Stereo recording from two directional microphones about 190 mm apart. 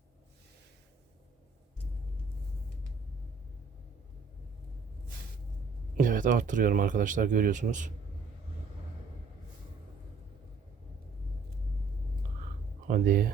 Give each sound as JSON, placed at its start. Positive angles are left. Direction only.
{"t": 6.0, "sound": "speech", "side_deg": -45}
{"t": 12.9, "sound": "speech", "side_deg": -50}